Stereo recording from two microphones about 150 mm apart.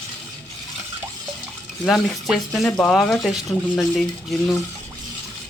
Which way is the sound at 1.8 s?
Centre (ahead or behind).